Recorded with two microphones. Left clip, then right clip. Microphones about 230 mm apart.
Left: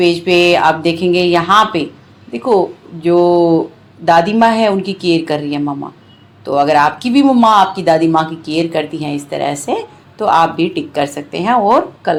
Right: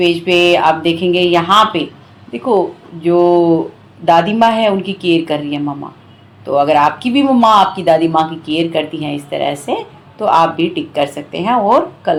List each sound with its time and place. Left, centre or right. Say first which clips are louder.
0.0 s speech: left 1 dB; left